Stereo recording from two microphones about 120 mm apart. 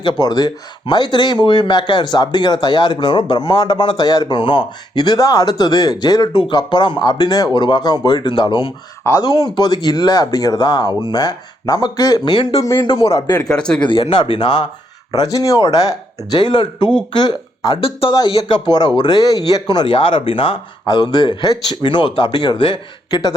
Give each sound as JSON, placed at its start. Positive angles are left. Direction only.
{"t": 0.0, "sound": "speech", "side_deg": 35}
{"t": 13.2, "sound": "speech", "side_deg": 35}
{"t": 13.5, "sound": "speech", "side_deg": 5}
{"t": 13.8, "sound": "speech", "side_deg": 45}
{"t": 15.1, "sound": "speech", "side_deg": 30}
{"t": 17.7, "sound": "speech", "side_deg": 50}